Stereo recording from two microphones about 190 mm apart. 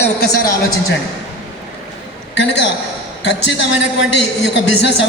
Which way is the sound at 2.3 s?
65° left (ahead or behind).